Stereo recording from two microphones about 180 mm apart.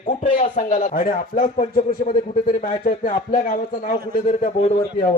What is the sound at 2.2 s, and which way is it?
Speech, 40° left (ahead or behind).